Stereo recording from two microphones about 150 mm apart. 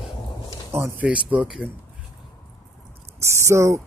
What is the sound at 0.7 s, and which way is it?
Speech, 15° right (ahead or behind).